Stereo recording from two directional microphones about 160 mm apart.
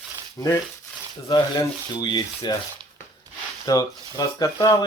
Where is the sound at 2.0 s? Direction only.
25° left (ahead or behind).